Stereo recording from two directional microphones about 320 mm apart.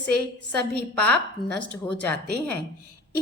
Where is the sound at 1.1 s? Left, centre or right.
Right.